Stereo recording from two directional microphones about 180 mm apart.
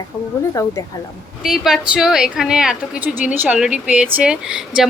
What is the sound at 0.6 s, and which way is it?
Speech, 20° left (ahead or behind).